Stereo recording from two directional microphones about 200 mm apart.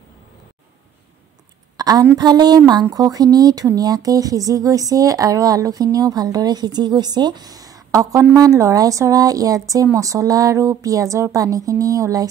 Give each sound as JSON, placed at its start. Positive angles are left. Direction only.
{"t": 1.8, "sound": "a woman's voice", "side_deg": -20}